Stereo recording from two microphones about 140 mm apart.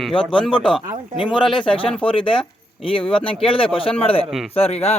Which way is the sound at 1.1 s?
35° left (ahead or behind).